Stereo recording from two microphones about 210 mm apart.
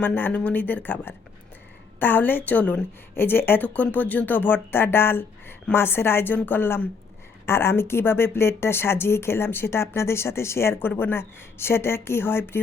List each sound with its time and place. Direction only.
0.0 s speech: 10° left (ahead or behind)